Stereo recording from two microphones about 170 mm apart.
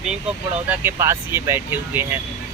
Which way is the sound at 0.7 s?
15° right (ahead or behind).